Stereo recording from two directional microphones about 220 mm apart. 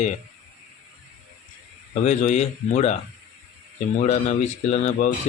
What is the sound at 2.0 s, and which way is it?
Speech, 30° left (ahead or behind).